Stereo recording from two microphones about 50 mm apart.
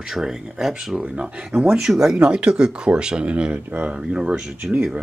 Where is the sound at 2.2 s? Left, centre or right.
Right.